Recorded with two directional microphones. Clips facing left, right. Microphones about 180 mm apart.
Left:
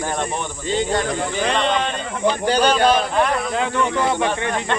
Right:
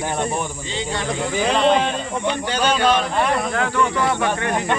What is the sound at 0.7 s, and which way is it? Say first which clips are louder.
Speech: left 6 dB; 45° left (ahead or behind).